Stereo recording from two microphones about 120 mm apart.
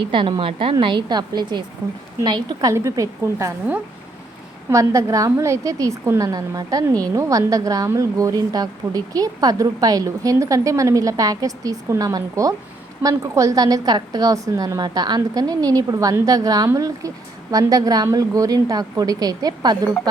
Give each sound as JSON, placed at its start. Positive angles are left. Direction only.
{"t": 0.0, "sound": "a woman's voice", "side_deg": -45}
{"t": 4.7, "sound": "a woman's voice", "side_deg": -25}